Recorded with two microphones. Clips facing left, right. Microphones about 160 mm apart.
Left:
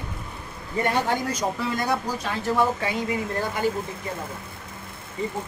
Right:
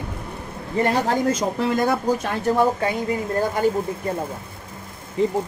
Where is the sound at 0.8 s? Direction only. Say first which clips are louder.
Right 4 dB; 35° right (ahead or behind).